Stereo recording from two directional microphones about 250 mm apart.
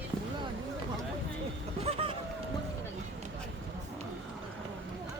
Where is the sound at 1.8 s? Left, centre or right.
Right.